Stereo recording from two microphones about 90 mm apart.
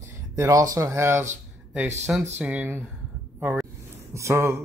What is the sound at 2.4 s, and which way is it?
Speech, 15° right (ahead or behind).